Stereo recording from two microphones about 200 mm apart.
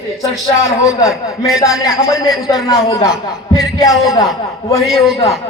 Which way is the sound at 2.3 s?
Centre (ahead or behind).